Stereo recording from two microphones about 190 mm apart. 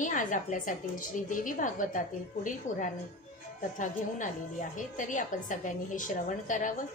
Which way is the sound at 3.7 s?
45° left (ahead or behind).